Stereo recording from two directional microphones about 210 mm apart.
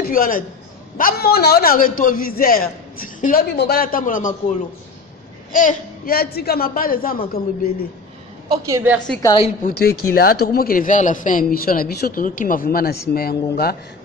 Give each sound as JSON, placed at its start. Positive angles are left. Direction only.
{"t": 0.0, "sound": "a man's voice", "side_deg": 45}
{"t": 5.5, "sound": "a man's voice", "side_deg": 40}
{"t": 8.5, "sound": "a woman's voice", "side_deg": -15}
{"t": 9.2, "sound": "a woman's voice", "side_deg": 20}
{"t": 9.6, "sound": "a man's voice", "side_deg": 45}